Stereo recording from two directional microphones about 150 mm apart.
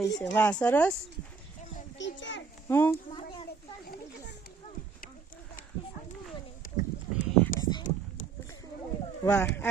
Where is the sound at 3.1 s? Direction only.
35° left (ahead or behind).